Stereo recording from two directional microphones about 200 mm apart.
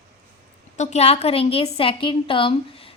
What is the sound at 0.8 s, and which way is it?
A woman's voice, 35° left (ahead or behind).